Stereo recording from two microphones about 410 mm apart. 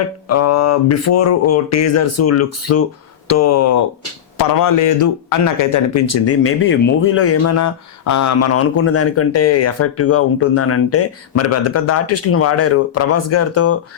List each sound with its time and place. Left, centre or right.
0.3 s speech: left
4.4 s speech: left